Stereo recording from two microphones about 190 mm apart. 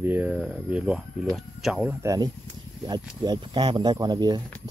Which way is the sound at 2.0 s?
20° right (ahead or behind).